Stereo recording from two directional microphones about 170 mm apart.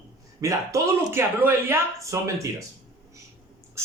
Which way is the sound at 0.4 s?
15° right (ahead or behind).